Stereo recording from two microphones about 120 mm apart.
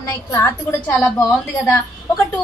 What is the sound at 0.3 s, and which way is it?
Speech, 25° left (ahead or behind).